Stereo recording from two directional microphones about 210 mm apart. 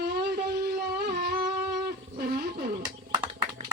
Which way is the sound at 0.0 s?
50° right (ahead or behind).